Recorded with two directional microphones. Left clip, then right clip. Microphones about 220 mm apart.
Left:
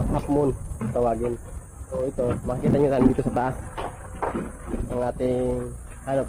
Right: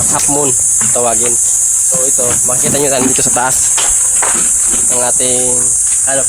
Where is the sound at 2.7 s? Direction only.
15° right (ahead or behind).